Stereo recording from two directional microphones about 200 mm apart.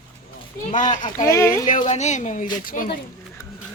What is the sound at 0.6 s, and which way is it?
Speech, 35° left (ahead or behind).